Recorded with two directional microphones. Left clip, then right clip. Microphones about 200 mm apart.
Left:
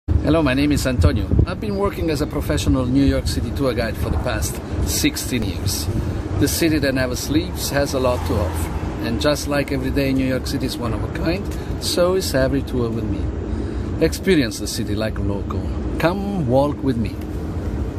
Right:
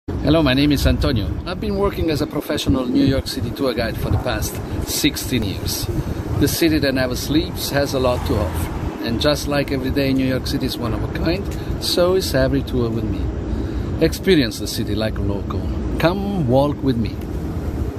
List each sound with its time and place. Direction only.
0.2 s speech: 5° left (ahead or behind)
13.9 s speech: 5° left (ahead or behind)